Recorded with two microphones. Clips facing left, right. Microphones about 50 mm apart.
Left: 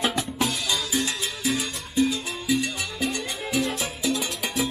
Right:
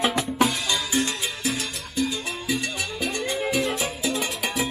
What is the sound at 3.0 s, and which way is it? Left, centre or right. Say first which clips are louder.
Music: right 5 dB; centre.